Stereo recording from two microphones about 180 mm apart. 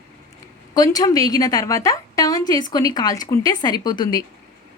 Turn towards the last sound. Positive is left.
turn(degrees=20)  # may be behind; listen again after turning